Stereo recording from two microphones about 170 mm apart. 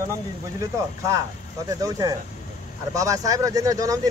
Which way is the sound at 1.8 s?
20° right (ahead or behind).